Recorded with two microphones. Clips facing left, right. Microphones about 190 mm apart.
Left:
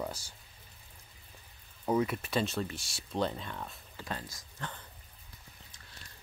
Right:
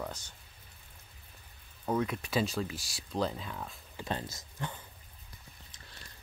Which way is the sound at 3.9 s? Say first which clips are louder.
Right 5 dB; 25° right (ahead or behind).